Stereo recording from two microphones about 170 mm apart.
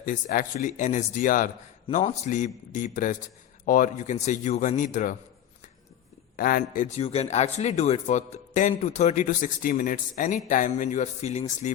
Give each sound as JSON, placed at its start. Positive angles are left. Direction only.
{"t": 0.0, "sound": "a man's voice", "side_deg": 55}
{"t": 6.3, "sound": "a man's voice", "side_deg": 55}